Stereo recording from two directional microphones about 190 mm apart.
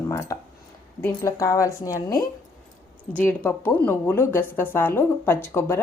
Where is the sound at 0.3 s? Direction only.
15° left (ahead or behind).